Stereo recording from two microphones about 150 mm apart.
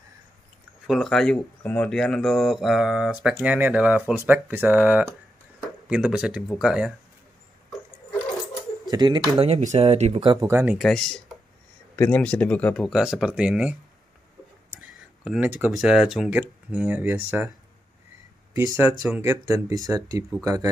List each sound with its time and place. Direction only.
0.8 s speech: centre (ahead or behind)
8.9 s speech: 30° right (ahead or behind)
9.6 s speech: 50° right (ahead or behind)
10.2 s speech: 35° right (ahead or behind)
10.5 s speech: 10° right (ahead or behind)
10.8 s speech: 5° left (ahead or behind)
14.8 s a sound: 10° right (ahead or behind)
15.8 s speech: 5° right (ahead or behind)
18.5 s speech: 20° right (ahead or behind)